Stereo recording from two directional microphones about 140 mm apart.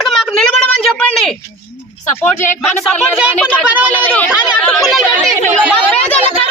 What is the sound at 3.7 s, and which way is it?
Speech, 10° right (ahead or behind).